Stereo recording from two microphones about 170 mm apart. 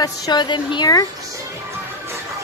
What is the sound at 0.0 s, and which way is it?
Speech, 25° left (ahead or behind).